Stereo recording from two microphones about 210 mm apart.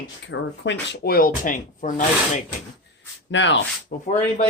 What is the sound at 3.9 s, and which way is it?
Speech, 45° left (ahead or behind).